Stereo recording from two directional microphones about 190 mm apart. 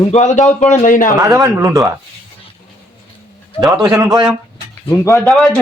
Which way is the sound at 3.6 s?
5° right (ahead or behind).